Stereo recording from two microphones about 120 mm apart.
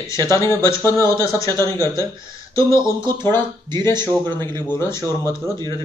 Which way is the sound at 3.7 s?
35° right (ahead or behind).